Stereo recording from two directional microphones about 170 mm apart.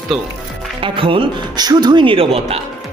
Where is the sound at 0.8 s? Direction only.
30° right (ahead or behind).